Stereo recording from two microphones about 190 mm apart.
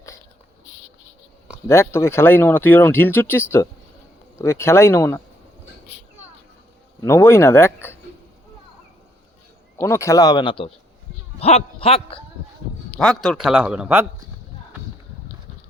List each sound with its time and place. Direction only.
1.6 s speech: 15° left (ahead or behind)
7.0 s speech: 15° left (ahead or behind)
9.7 s a man's voice: 15° left (ahead or behind); by 12.2 s 30° left (ahead or behind)
13.0 s speech: centre (ahead or behind)